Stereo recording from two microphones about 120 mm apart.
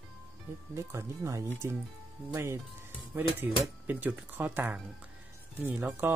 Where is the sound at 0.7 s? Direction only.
25° right (ahead or behind).